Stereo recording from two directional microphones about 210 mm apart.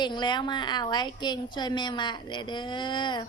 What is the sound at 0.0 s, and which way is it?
A woman's voice, 20° left (ahead or behind).